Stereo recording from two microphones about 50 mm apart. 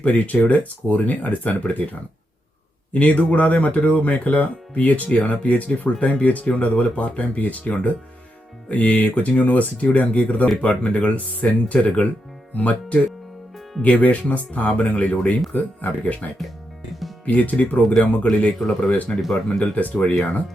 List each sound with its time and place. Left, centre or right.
0.0 s speech: left